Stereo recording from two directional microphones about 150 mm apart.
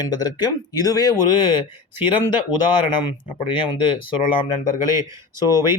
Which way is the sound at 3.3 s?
35° left (ahead or behind).